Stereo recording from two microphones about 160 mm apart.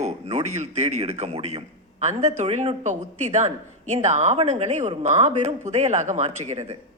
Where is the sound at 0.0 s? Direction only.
45° right (ahead or behind).